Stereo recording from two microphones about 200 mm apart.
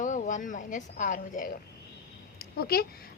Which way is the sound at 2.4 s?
50° left (ahead or behind).